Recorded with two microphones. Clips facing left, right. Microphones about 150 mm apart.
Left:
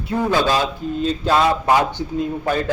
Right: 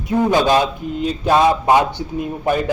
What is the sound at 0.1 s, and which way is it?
A man's voice, 15° right (ahead or behind).